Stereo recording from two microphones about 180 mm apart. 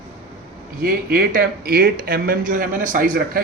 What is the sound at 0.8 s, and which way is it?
Speech, 55° right (ahead or behind).